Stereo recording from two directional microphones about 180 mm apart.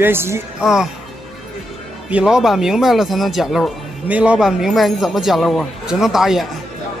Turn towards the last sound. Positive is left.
turn(degrees=0)  # may be behind; listen again after turning